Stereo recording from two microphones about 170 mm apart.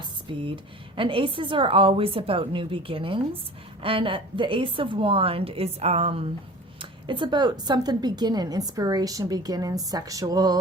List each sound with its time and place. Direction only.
0.3 s a woman's voice: 30° right (ahead or behind)